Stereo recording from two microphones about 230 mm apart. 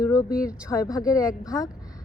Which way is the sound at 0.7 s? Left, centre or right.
Centre.